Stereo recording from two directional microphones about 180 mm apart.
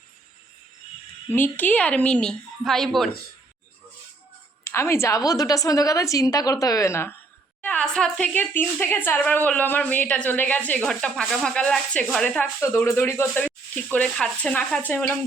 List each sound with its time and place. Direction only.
1.3 s a woman's voice: 10° left (ahead or behind)
4.6 s a woman's voice: 15° left (ahead or behind)